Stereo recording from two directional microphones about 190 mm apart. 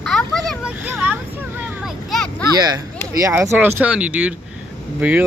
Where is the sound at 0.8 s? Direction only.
10° right (ahead or behind).